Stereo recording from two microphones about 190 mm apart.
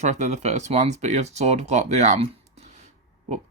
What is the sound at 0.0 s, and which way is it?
Speech, 35° right (ahead or behind).